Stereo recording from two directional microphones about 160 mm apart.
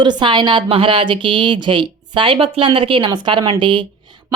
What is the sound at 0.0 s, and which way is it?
A woman's voice, 30° right (ahead or behind).